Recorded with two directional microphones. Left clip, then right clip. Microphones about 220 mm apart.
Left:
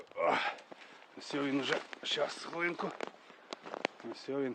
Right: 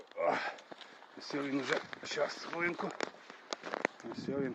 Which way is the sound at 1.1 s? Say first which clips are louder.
Left 1 dB; 20° left (ahead or behind).